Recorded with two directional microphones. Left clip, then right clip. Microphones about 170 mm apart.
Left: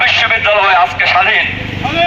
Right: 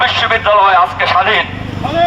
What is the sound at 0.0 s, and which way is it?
Speech, 25° right (ahead or behind).